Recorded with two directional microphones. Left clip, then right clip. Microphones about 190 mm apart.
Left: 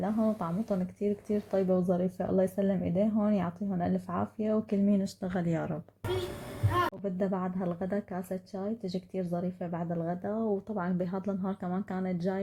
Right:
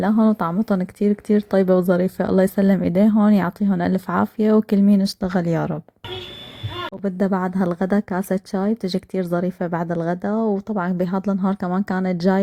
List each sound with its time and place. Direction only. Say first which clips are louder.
0.0 s speech: right 12 dB; 35° right (ahead or behind)
7.0 s speech: right 10 dB; 30° right (ahead or behind)